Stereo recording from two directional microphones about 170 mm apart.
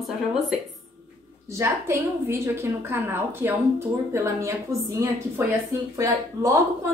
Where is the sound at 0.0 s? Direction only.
Centre (ahead or behind).